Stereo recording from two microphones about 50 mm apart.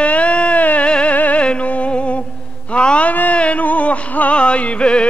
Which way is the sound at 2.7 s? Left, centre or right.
Left.